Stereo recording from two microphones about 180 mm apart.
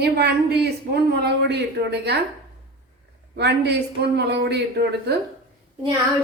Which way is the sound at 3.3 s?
65° right (ahead or behind).